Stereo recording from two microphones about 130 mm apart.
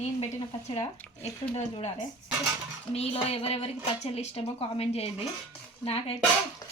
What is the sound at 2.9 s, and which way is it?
A woman's voice, 50° left (ahead or behind).